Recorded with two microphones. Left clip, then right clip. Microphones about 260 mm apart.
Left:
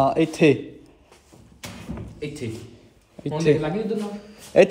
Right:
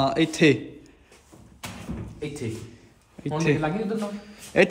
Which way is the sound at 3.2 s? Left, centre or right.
Centre.